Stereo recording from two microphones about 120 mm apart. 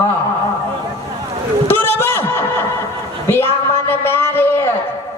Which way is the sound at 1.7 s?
20° left (ahead or behind).